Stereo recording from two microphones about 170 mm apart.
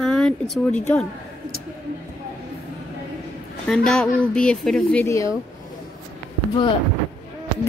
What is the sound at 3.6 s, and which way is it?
Speech, 5° left (ahead or behind).